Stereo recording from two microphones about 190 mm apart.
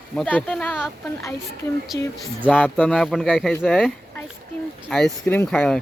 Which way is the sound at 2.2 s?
Centre (ahead or behind).